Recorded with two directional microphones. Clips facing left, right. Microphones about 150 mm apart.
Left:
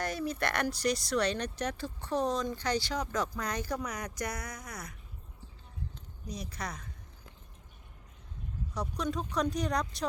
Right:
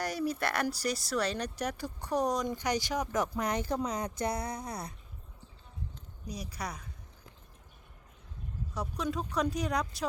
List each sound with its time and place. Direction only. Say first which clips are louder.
0.0 s speech: right 1 dB; 10° right (ahead or behind); by 4.9 s 30° right (ahead or behind)
6.2 s speech: even; 10° right (ahead or behind)
8.7 s speech: even; 5° right (ahead or behind)